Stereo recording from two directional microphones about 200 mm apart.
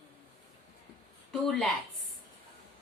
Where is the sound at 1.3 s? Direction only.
Centre (ahead or behind).